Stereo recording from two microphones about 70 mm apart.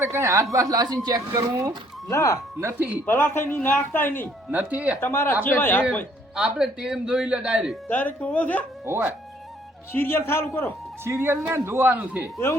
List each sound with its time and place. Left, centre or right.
0.0 s speech: right
0.5 s speech: right
2.0 s speech: left
2.7 s speech: right
3.1 s speech: left
4.5 s speech: right
4.9 s speech: left
6.3 s a man's voice: centre
7.9 s speech: left
8.8 s speech: right
9.9 s speech: left
11.0 s speech: right